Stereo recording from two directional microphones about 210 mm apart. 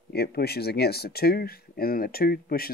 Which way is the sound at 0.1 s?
50° left (ahead or behind).